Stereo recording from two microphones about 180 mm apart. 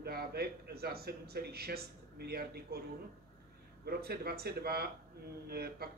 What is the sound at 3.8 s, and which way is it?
A man's voice, 60° right (ahead or behind).